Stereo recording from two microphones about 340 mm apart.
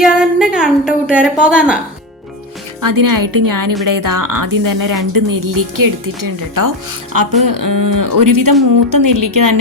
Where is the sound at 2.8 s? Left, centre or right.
Right.